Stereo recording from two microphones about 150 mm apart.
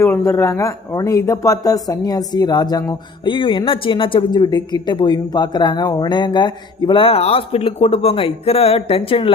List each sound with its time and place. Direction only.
0.0 s speech: 15° left (ahead or behind); by 9.3 s 35° left (ahead or behind)